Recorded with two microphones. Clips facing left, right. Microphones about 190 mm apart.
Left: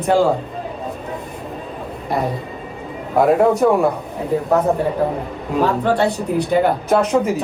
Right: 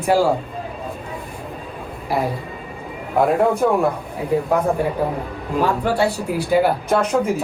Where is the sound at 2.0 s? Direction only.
Centre (ahead or behind).